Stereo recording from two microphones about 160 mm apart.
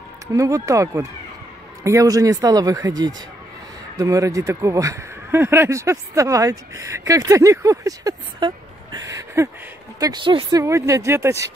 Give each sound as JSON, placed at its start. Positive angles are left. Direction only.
{"t": 0.3, "sound": "speech", "side_deg": -20}
{"t": 10.6, "sound": "speech", "side_deg": -20}